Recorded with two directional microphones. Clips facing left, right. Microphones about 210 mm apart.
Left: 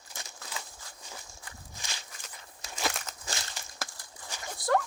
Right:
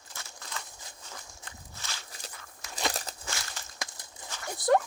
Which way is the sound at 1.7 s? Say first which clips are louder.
Even; 15° left (ahead or behind).